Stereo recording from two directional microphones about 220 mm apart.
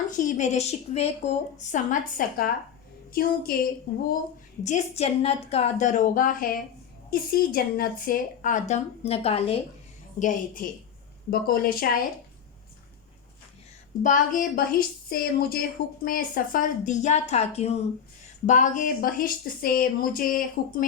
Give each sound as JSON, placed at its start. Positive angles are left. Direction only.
{"t": 0.1, "sound": "a woman's voice", "side_deg": 35}
{"t": 4.6, "sound": "a woman's voice", "side_deg": 30}
{"t": 10.2, "sound": "a woman's voice", "side_deg": 35}
{"t": 14.0, "sound": "a woman's voice", "side_deg": 35}